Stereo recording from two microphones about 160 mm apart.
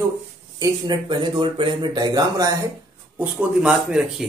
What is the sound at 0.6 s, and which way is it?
Speech, 30° right (ahead or behind).